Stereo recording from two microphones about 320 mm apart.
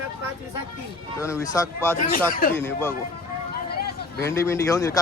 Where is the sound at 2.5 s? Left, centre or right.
Centre.